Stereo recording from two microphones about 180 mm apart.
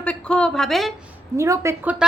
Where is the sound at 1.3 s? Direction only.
15° right (ahead or behind).